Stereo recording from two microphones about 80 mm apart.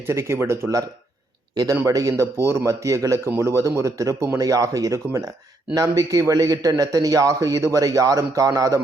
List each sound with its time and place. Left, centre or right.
0.1 s speech: right
1.9 s a man's voice: right